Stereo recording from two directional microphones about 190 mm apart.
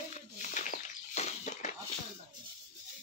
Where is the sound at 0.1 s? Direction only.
40° left (ahead or behind).